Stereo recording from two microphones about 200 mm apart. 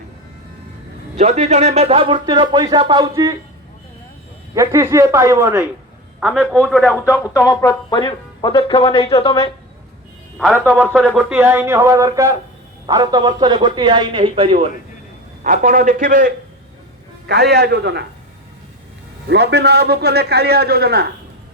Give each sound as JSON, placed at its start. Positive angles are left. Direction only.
{"t": 1.1, "sound": "speech", "side_deg": -35}
{"t": 4.5, "sound": "speech", "side_deg": -15}
{"t": 6.1, "sound": "a man's voice", "side_deg": 0}
{"t": 7.1, "sound": "speech", "side_deg": 15}
{"t": 10.5, "sound": "speech", "side_deg": -10}
{"t": 15.4, "sound": "a man's voice", "side_deg": -40}
{"t": 19.3, "sound": "a man's voice", "side_deg": -55}